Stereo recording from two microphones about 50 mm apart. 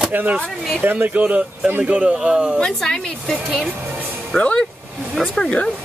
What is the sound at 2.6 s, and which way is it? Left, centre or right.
A woman's voice, centre.